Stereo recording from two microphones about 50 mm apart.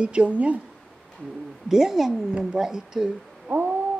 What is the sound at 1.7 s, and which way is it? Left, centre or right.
A woman's voice, centre.